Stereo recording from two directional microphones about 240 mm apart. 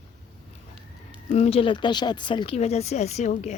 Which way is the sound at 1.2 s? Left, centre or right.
Left.